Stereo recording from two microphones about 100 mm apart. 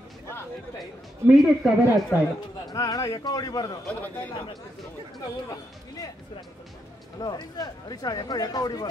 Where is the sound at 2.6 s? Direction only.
35° left (ahead or behind).